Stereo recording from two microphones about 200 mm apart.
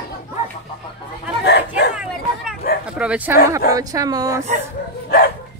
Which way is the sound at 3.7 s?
15° right (ahead or behind).